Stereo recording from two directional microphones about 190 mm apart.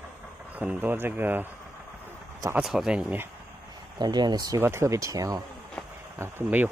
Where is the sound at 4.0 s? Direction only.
20° right (ahead or behind).